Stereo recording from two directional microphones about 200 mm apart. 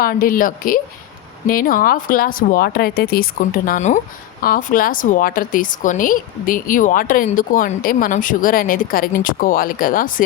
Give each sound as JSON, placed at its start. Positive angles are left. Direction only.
{"t": 0.0, "sound": "speech", "side_deg": 45}